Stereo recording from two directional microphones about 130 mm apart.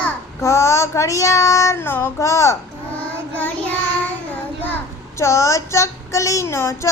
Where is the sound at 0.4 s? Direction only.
20° left (ahead or behind).